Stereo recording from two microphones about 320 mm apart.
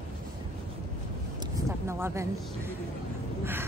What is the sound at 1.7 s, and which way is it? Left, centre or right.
Speech, centre.